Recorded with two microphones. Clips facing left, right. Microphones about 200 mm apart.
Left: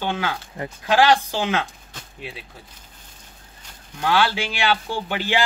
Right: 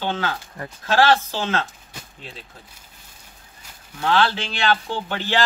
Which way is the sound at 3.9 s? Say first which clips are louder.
Even; 10° left (ahead or behind).